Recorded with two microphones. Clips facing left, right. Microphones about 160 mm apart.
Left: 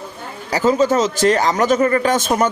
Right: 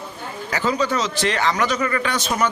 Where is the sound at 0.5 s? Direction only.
45° left (ahead or behind).